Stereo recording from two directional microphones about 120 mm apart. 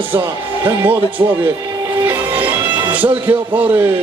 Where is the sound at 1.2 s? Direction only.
35° right (ahead or behind).